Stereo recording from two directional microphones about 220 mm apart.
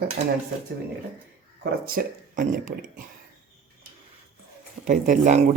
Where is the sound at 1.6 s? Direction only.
45° right (ahead or behind).